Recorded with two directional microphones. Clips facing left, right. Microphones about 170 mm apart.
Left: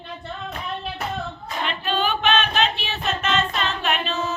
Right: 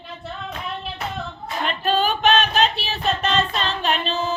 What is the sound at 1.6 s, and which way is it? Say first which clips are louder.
Child singing: right 3 dB; 40° right (ahead or behind).